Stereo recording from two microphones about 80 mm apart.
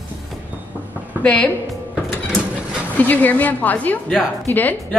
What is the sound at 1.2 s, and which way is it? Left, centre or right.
Speech, centre.